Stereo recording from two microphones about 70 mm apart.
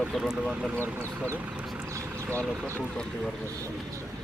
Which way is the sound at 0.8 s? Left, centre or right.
Right.